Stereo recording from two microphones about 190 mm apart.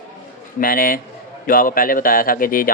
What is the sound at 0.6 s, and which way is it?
Speech, 50° left (ahead or behind).